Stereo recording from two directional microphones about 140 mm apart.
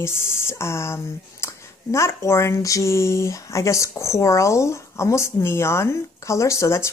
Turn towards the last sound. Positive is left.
turn(degrees=20)  # may be behind; listen again after turning